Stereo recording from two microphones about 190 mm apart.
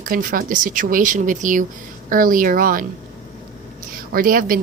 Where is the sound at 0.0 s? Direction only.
45° right (ahead or behind).